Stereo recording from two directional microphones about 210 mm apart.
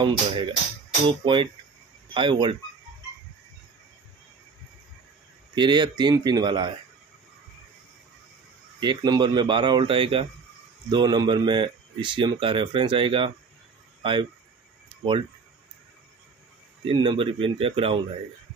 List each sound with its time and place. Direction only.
0.0 s speech: 25° right (ahead or behind)
5.5 s speech: 20° right (ahead or behind)
8.7 s speech: 20° right (ahead or behind)
16.8 s speech: 20° right (ahead or behind)